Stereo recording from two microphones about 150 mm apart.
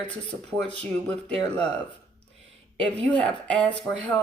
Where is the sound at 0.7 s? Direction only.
10° left (ahead or behind).